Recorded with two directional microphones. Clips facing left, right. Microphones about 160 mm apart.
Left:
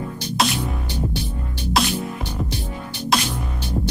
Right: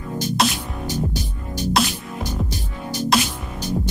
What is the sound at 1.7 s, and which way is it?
Music, centre (ahead or behind).